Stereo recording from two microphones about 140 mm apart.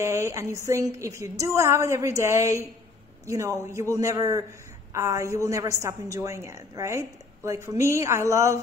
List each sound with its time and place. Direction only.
0.0 s a woman's voice: 20° right (ahead or behind)